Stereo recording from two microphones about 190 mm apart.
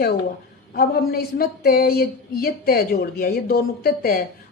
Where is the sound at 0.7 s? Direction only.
55° left (ahead or behind).